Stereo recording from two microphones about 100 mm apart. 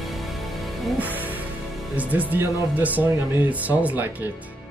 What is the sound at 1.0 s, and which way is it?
Music, 15° right (ahead or behind).